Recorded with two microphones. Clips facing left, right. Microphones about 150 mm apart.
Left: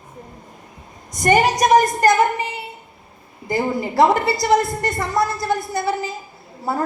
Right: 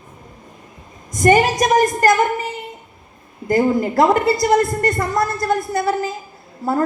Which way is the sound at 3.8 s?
50° right (ahead or behind).